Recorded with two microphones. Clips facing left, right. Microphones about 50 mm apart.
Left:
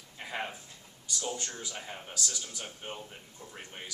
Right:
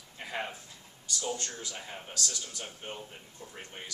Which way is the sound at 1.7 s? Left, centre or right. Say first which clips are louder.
Even; centre.